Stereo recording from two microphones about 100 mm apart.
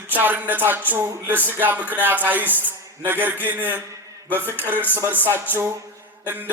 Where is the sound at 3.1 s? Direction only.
20° right (ahead or behind).